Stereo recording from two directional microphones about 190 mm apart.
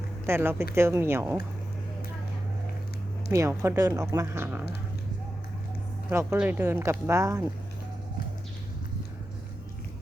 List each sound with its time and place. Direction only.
0.3 s speech: 10° right (ahead or behind)
3.3 s speech: 15° right (ahead or behind)
6.1 s speech: 10° right (ahead or behind)